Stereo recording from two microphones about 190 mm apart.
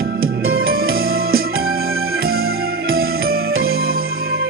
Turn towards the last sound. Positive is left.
turn(degrees=-55)  # may be behind; listen again after turning